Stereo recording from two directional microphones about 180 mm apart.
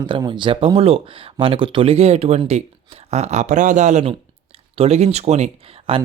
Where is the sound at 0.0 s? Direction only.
25° right (ahead or behind).